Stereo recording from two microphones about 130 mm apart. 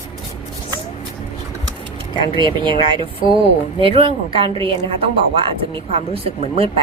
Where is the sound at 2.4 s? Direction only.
40° right (ahead or behind).